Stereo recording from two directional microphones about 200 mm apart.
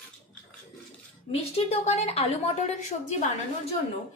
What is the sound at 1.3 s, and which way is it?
A woman's voice, 30° left (ahead or behind).